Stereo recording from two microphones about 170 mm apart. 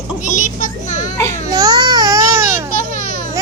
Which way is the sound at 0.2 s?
50° left (ahead or behind).